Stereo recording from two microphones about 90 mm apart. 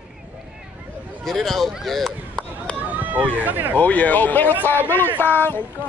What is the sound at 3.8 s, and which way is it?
Speech, 15° left (ahead or behind).